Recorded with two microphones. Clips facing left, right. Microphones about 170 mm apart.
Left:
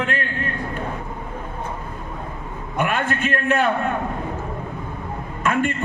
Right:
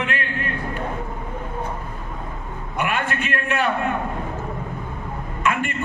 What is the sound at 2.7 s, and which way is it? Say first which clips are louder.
Speech: left 2 dB; 45° left (ahead or behind).